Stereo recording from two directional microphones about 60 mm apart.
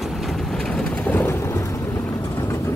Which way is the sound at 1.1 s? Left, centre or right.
Left.